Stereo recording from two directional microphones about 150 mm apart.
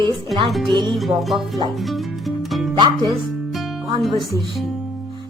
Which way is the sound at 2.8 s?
35° right (ahead or behind).